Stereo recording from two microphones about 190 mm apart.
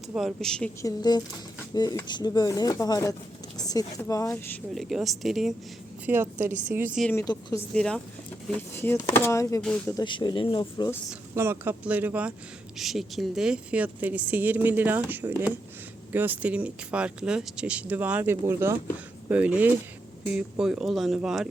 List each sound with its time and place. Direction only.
0.1 s speech: centre (ahead or behind)
0.8 s speech: 20° left (ahead or behind)
4.7 s a woman's voice: centre (ahead or behind)
6.5 s a woman's voice: 40° right (ahead or behind)
7.1 s speech: 15° left (ahead or behind)
7.7 s speech: 5° left (ahead or behind)
9.6 s speech: 5° left (ahead or behind)
9.9 s speech: 25° left (ahead or behind)
11.3 s a woman's voice: 15° right (ahead or behind)